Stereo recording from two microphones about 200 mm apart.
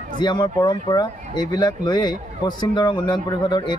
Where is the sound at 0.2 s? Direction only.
20° left (ahead or behind).